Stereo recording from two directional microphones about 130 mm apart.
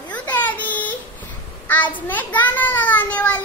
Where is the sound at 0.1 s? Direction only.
10° left (ahead or behind).